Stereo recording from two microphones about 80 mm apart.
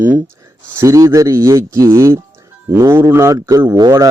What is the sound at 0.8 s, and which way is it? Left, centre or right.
Speech, right.